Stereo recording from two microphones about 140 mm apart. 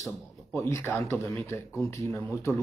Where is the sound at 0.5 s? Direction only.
20° left (ahead or behind).